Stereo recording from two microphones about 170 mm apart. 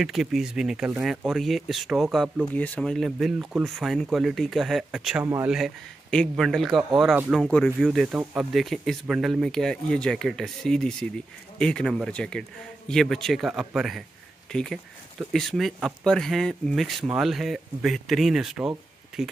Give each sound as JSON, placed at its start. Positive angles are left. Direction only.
{"t": 0.0, "sound": "speech", "side_deg": 0}
{"t": 2.5, "sound": "speech", "side_deg": 10}
{"t": 5.2, "sound": "speech", "side_deg": -15}
{"t": 5.5, "sound": "speech", "side_deg": 0}
{"t": 7.4, "sound": "speech", "side_deg": 5}